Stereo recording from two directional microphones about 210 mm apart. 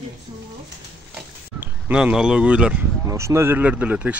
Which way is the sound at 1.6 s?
5° right (ahead or behind).